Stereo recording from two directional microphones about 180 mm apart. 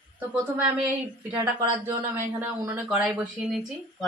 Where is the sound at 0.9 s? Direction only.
10° right (ahead or behind).